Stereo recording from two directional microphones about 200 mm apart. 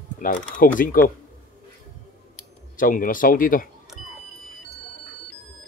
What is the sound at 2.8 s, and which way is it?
Speech, 45° left (ahead or behind).